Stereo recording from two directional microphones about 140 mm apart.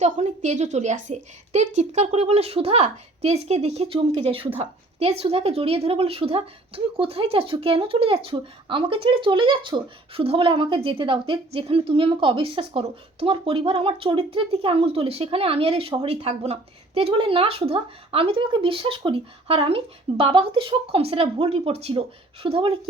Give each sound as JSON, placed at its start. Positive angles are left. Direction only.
{"t": 0.0, "sound": "a woman's voice", "side_deg": -55}